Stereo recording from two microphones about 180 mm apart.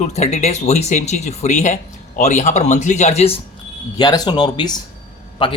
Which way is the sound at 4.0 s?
20° left (ahead or behind).